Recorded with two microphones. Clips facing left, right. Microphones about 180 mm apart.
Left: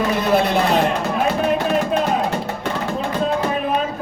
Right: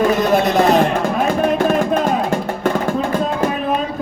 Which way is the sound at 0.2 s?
45° right (ahead or behind).